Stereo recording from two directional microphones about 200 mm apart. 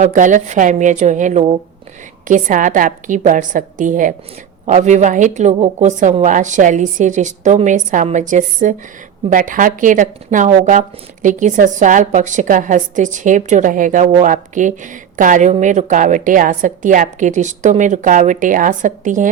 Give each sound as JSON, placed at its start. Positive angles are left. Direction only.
{"t": 0.0, "sound": "a woman's voice", "side_deg": -40}